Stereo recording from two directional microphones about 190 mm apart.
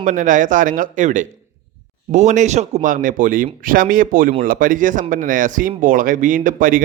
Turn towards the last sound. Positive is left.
turn(degrees=-45)  # may be behind; listen again after turning